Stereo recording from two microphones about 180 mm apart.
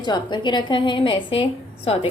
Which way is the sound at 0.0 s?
25° left (ahead or behind).